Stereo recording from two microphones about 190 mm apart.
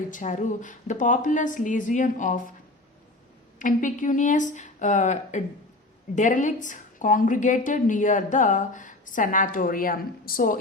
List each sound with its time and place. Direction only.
0.1 s a woman's voice: 40° left (ahead or behind)
3.6 s a woman's voice: 45° left (ahead or behind)